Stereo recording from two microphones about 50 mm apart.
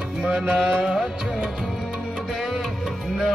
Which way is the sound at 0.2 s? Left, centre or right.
Centre.